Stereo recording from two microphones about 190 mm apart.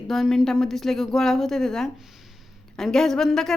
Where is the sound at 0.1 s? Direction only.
Centre (ahead or behind).